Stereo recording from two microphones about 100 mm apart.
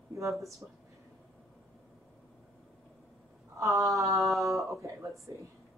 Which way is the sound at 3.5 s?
35° right (ahead or behind).